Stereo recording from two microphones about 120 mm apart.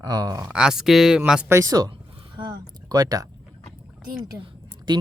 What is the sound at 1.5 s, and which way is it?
Speech, 25° right (ahead or behind).